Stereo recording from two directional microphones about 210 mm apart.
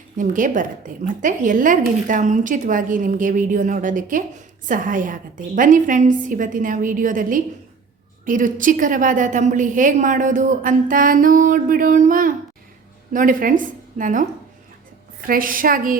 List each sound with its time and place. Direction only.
0.2 s a woman's voice: 40° right (ahead or behind)
15.3 s a woman's voice: 40° right (ahead or behind)